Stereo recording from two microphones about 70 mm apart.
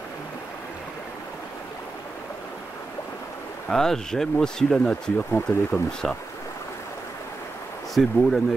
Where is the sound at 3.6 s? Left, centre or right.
Centre.